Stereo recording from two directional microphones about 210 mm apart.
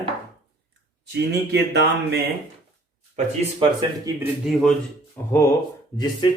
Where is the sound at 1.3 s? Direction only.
50° right (ahead or behind).